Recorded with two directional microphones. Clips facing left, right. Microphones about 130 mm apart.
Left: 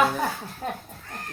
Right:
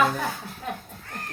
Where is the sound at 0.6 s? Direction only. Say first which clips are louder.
Left 2 dB; 35° left (ahead or behind).